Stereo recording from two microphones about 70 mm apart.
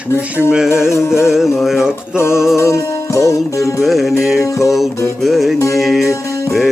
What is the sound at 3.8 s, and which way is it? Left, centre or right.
Music, centre.